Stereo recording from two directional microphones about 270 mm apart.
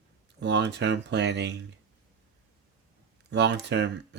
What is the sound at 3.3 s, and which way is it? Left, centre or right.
Speech, right.